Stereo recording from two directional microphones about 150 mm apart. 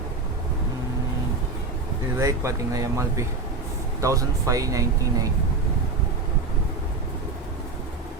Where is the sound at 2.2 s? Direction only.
20° right (ahead or behind).